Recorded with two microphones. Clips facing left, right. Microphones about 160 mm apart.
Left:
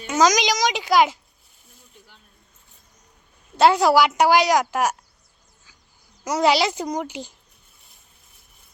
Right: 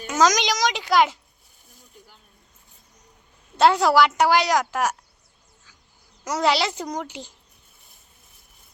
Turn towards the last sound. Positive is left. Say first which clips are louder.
# left 3 dB
turn(degrees=10)  # may be behind; listen again after turning